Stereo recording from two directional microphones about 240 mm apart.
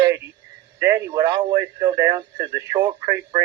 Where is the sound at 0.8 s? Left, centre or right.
Centre.